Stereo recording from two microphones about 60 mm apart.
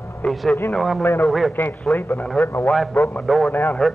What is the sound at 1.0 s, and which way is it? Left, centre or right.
A man's voice, left.